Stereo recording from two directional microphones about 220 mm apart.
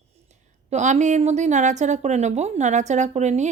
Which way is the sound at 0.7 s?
35° right (ahead or behind).